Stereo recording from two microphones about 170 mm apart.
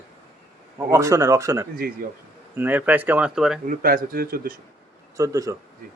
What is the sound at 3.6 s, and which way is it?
Speech, 60° right (ahead or behind).